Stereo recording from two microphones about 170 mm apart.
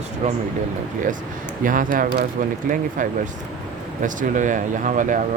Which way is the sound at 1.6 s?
50° right (ahead or behind).